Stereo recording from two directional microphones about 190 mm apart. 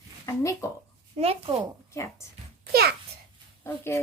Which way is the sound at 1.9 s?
15° left (ahead or behind).